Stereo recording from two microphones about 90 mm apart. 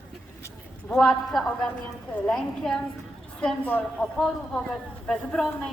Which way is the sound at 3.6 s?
20° left (ahead or behind).